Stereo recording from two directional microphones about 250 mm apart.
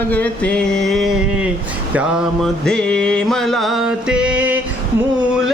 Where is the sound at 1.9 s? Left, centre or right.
Centre.